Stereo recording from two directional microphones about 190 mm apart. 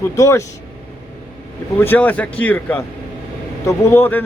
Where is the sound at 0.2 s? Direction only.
15° left (ahead or behind).